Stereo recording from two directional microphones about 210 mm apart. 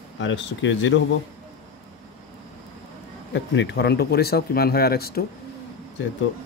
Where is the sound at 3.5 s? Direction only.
55° left (ahead or behind).